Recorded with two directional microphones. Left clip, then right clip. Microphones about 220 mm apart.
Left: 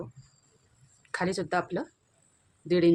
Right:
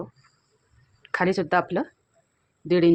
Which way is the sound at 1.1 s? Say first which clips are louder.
Right 7 dB; 20° right (ahead or behind).